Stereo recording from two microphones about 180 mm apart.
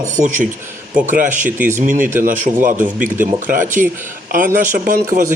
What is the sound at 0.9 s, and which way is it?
Speech, 45° right (ahead or behind).